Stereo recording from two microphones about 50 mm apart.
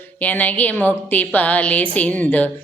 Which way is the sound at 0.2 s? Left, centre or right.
Left.